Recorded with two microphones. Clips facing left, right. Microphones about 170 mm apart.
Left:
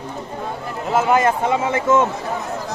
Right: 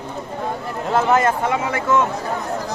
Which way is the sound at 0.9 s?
10° left (ahead or behind).